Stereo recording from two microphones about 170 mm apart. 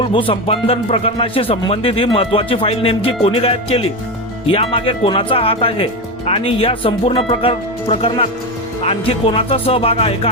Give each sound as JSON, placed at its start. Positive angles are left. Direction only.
{"t": 0.0, "sound": "speech", "side_deg": 30}